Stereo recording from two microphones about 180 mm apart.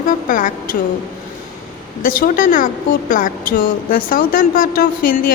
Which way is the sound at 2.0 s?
50° left (ahead or behind).